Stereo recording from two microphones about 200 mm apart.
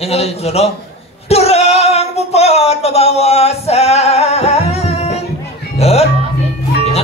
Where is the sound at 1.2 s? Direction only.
30° left (ahead or behind).